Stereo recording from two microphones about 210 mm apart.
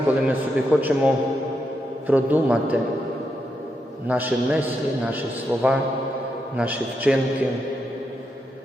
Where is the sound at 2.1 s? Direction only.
10° right (ahead or behind).